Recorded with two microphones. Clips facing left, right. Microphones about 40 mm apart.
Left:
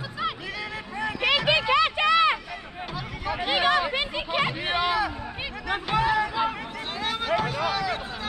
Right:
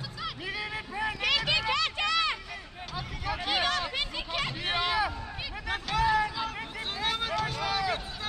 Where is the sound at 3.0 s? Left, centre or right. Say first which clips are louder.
Left 3 dB; centre.